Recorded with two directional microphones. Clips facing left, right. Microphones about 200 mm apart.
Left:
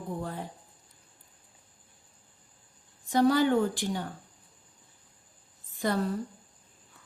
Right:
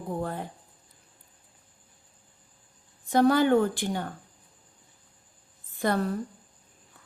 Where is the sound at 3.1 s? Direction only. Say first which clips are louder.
Right 2 dB; 55° right (ahead or behind).